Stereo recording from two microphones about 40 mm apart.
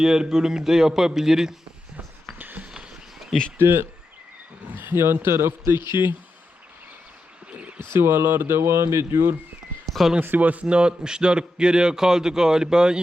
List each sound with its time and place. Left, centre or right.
0.0 s a man's voice: centre
2.4 s a sound: right
2.6 s a sound: centre
3.6 s speech: right
4.8 s speech: right
5.2 s a man's voice: right
7.9 s speech: right
9.8 s a sound: centre
10.2 s speech: right
10.7 s a man's voice: right